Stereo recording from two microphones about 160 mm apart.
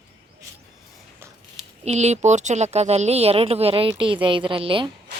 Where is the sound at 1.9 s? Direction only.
45° right (ahead or behind).